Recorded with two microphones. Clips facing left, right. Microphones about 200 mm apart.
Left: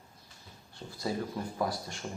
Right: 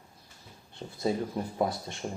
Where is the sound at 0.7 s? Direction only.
20° right (ahead or behind).